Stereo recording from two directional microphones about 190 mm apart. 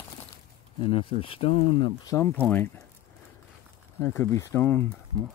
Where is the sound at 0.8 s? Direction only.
30° left (ahead or behind).